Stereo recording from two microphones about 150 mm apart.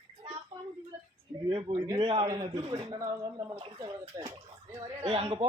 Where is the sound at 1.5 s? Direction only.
35° right (ahead or behind).